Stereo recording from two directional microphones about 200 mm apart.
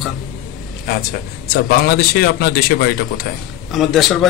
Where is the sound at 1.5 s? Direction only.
50° left (ahead or behind).